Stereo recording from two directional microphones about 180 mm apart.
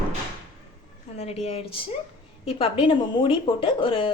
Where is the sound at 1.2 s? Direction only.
35° left (ahead or behind).